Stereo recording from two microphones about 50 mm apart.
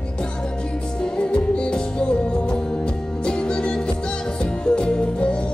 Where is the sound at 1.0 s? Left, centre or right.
Left.